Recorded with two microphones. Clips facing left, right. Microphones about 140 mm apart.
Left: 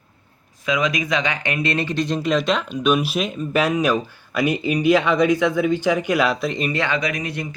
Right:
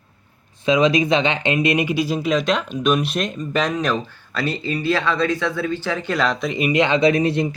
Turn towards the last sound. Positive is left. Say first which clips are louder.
# right 9 dB
turn(degrees=-30)  # may be behind; listen again after turning